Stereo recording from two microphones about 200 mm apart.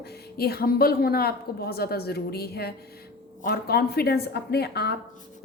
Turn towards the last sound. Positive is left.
turn(degrees=55)  # may be behind; listen again after turning